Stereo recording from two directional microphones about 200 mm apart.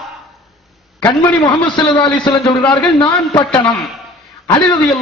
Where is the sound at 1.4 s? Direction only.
20° left (ahead or behind).